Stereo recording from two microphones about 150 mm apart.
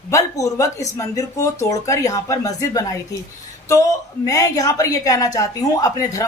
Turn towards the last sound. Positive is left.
turn(degrees=20)  # may be behind; listen again after turning